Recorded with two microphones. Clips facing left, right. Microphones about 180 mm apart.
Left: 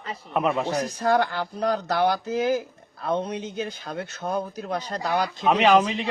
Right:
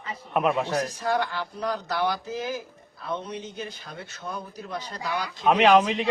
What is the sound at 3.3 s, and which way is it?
Speech, 85° left.